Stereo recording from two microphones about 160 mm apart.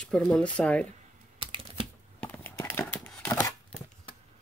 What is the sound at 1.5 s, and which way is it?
Typing, 30° right (ahead or behind).